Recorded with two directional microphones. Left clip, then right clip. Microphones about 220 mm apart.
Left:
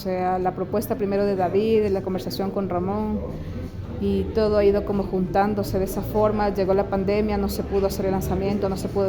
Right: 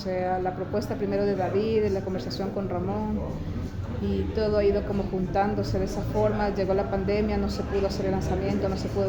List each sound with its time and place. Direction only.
0.1 s speech: 50° left (ahead or behind)
4.0 s speech: 50° left (ahead or behind)